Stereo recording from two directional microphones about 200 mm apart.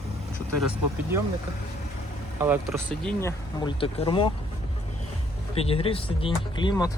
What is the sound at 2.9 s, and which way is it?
Speech, 5° left (ahead or behind).